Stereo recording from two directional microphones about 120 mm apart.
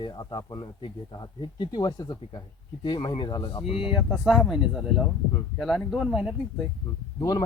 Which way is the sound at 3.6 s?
50° left (ahead or behind).